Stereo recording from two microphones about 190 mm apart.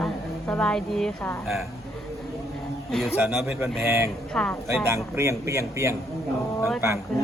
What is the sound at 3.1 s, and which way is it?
Speech, 5° right (ahead or behind).